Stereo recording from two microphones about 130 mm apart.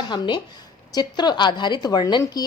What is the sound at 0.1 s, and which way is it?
A woman's voice, 35° left (ahead or behind).